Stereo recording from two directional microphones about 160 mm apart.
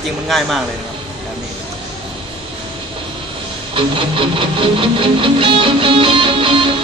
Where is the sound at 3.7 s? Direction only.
30° right (ahead or behind).